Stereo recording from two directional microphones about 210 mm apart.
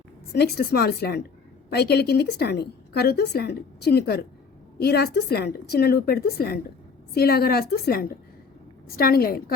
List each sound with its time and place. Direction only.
0.3 s a woman's voice: 50° left (ahead or behind)